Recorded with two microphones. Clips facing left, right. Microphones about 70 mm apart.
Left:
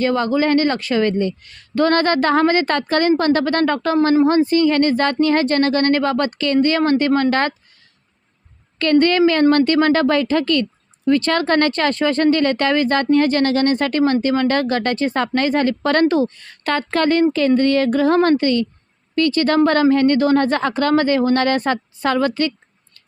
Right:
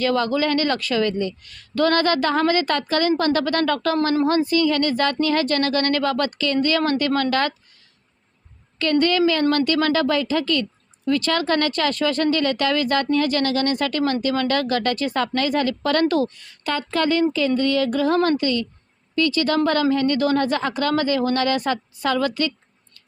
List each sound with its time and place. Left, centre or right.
0.0 s a woman's voice: left
8.8 s a woman's voice: left
16.0 s a woman's voice: left
16.5 s a woman's voice: left